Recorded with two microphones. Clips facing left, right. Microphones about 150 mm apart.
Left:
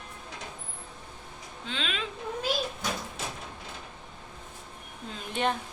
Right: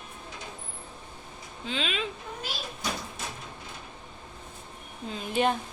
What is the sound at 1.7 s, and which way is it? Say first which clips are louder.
Speech: right 3 dB; 5° right (ahead or behind).